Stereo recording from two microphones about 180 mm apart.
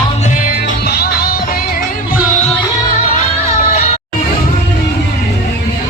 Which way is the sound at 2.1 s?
45° left (ahead or behind).